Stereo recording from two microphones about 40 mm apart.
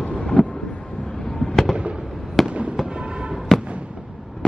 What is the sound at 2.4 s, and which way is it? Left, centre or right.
Fireworks, right.